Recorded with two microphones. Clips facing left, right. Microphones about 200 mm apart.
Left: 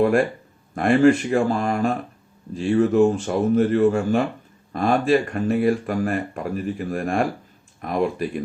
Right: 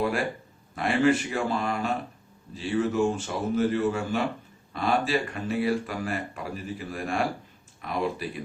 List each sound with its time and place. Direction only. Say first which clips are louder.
0.8 s speech: left 7 dB; 50° left (ahead or behind)